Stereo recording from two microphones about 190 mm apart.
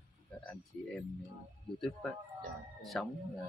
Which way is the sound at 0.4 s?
5° left (ahead or behind).